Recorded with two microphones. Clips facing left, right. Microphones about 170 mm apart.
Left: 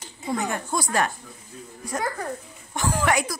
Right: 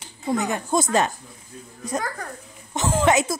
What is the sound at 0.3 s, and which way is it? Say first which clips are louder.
Speech: right 4 dB; 20° right (ahead or behind).